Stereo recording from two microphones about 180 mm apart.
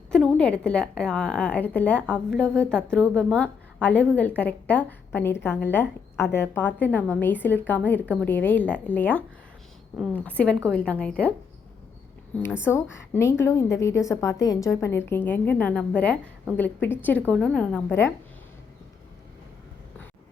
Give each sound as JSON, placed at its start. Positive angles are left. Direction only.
{"t": 0.1, "sound": "a woman's voice", "side_deg": 5}
{"t": 12.5, "sound": "a woman's voice", "side_deg": 15}